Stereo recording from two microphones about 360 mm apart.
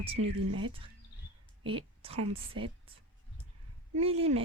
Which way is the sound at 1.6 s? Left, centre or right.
Centre.